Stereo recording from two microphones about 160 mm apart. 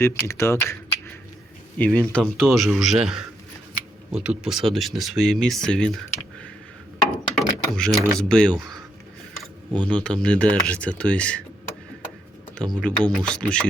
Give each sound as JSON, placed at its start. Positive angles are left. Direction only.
{"t": 0.0, "sound": "speech", "side_deg": 15}
{"t": 0.6, "sound": "a sound", "side_deg": 20}
{"t": 1.8, "sound": "speech", "side_deg": 10}
{"t": 7.3, "sound": "speech", "side_deg": 0}
{"t": 9.8, "sound": "speech", "side_deg": 5}
{"t": 12.8, "sound": "speech", "side_deg": 5}